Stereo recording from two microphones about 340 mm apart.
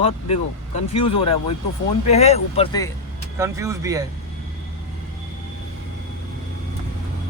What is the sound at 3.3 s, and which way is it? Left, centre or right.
Speech, centre.